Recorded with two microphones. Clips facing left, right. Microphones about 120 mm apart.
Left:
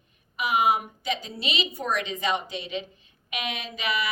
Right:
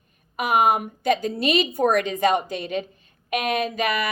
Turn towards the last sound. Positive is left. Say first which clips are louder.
# right 6 dB
turn(degrees=-50)  # may be behind; listen again after turning